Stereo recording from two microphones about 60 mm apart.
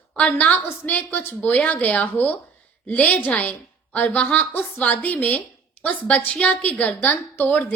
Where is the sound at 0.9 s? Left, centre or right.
Left.